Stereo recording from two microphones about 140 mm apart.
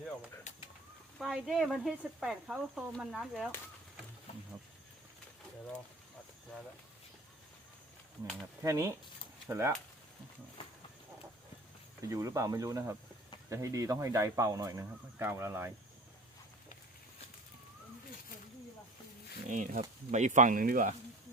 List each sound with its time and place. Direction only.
0.5 s bird: 60° left (ahead or behind)
1.2 s speech: centre (ahead or behind)
8.6 s speech: 20° right (ahead or behind)
12.0 s speech: 25° right (ahead or behind)
19.5 s speech: 65° right (ahead or behind); by 20.9 s 85° right